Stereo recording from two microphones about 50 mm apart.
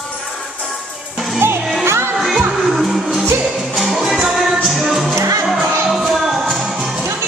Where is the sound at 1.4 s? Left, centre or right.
Right.